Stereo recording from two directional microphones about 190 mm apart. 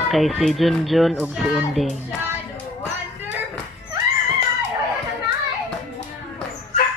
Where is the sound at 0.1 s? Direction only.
Centre (ahead or behind).